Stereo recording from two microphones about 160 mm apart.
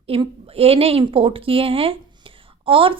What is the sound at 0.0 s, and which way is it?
A woman's voice, 35° right (ahead or behind).